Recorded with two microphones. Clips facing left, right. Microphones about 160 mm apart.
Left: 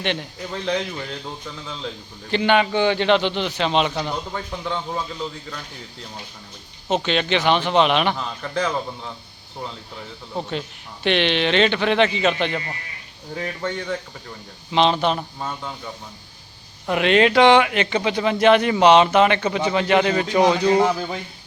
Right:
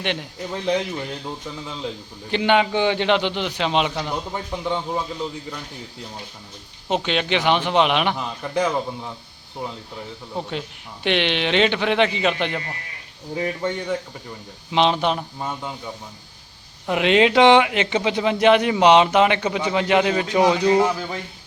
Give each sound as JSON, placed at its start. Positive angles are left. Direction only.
{"t": 0.0, "sound": "speech", "side_deg": -10}
{"t": 2.3, "sound": "speech", "side_deg": -15}
{"t": 6.8, "sound": "speech", "side_deg": -15}
{"t": 11.0, "sound": "speech", "side_deg": -15}
{"t": 16.9, "sound": "speech", "side_deg": -15}
{"t": 20.7, "sound": "speech", "side_deg": 20}